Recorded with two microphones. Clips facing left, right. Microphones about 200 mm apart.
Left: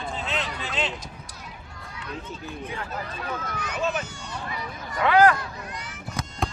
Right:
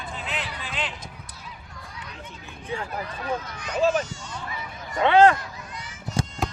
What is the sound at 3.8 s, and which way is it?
Speech, 35° right (ahead or behind).